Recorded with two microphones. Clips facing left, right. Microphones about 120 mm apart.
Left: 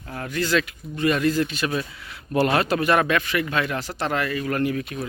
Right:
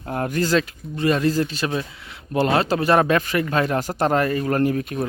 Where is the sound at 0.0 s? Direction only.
45° right (ahead or behind).